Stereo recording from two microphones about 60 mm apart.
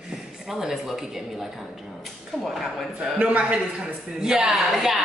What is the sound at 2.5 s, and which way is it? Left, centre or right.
Speech, centre.